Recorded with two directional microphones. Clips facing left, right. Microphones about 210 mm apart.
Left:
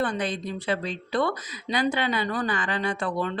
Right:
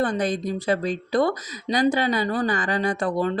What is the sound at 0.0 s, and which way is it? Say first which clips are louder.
Speech: right 4 dB; 40° right (ahead or behind).